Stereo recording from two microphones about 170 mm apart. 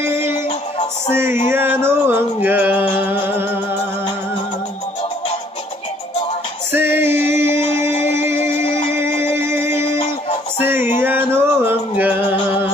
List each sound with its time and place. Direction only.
1.1 s music: 15° right (ahead or behind)
6.7 s music: 15° right (ahead or behind)
8.6 s music: 30° left (ahead or behind)
9.0 s music: 15° right (ahead or behind)
11.0 s a sound: 10° right (ahead or behind)